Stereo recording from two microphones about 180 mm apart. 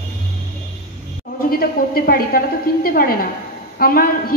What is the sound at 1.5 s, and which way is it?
A woman's voice, 55° left (ahead or behind).